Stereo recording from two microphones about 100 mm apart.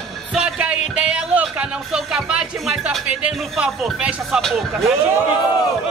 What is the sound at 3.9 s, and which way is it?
Speech, 5° right (ahead or behind).